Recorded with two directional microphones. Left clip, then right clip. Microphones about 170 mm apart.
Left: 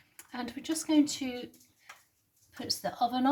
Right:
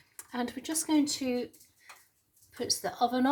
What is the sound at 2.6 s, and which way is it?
Speech, 25° right (ahead or behind).